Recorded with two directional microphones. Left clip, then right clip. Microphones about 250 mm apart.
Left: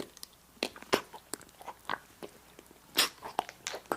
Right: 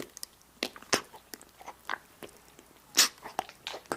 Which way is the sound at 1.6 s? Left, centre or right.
Centre.